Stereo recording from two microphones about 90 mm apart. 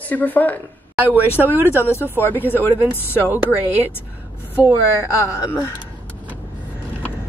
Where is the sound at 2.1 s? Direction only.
25° left (ahead or behind).